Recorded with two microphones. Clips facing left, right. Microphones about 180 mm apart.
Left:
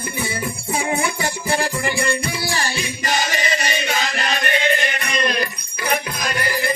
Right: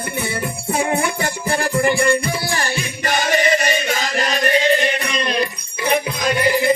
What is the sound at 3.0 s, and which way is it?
Music, 55° right (ahead or behind).